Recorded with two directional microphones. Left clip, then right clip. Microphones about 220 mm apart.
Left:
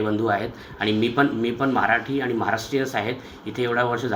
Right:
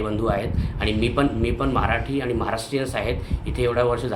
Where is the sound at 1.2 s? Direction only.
10° right (ahead or behind).